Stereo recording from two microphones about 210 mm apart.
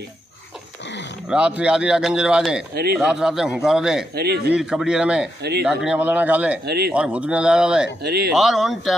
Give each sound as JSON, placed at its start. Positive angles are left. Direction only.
{"t": 1.3, "sound": "speech", "side_deg": -5}
{"t": 2.7, "sound": "speech", "side_deg": -50}
{"t": 3.0, "sound": "speech", "side_deg": -5}
{"t": 4.1, "sound": "speech", "side_deg": -50}
{"t": 4.5, "sound": "speech", "side_deg": -5}
{"t": 6.6, "sound": "speech", "side_deg": -50}
{"t": 6.9, "sound": "speech", "side_deg": -5}
{"t": 8.0, "sound": "speech", "side_deg": -50}
{"t": 8.3, "sound": "speech", "side_deg": 0}